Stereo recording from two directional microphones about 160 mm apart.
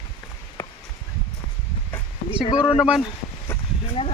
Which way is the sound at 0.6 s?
15° left (ahead or behind).